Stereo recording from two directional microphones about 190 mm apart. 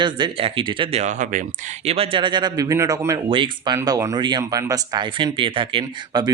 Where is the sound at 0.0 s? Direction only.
25° right (ahead or behind).